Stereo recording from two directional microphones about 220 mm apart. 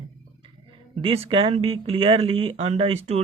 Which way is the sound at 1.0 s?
25° right (ahead or behind).